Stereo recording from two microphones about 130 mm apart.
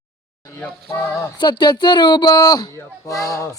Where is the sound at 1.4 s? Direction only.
35° left (ahead or behind).